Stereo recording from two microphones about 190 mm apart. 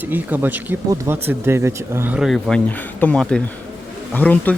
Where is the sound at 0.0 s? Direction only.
10° right (ahead or behind).